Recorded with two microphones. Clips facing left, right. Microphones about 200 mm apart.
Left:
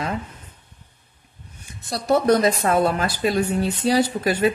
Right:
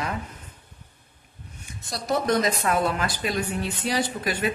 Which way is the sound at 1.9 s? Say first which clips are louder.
Left 6 dB; 40° left (ahead or behind).